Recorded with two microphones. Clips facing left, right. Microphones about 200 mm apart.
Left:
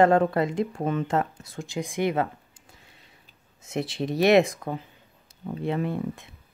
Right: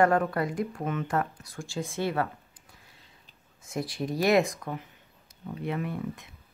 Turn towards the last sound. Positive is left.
turn(degrees=30)  # may be behind; listen again after turning